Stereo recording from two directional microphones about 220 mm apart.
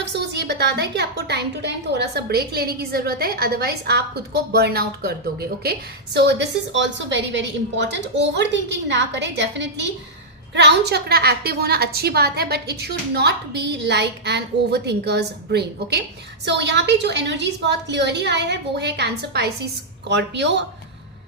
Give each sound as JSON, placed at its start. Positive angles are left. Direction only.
{"t": 0.0, "sound": "a woman's voice", "side_deg": -50}